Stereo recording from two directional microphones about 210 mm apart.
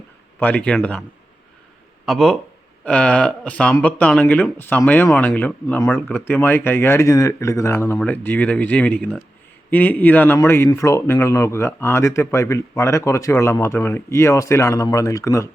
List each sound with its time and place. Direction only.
0.3 s speech: 10° left (ahead or behind)
2.0 s speech: centre (ahead or behind)